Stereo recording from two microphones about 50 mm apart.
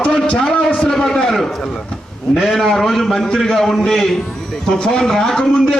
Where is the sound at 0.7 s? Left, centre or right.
Centre.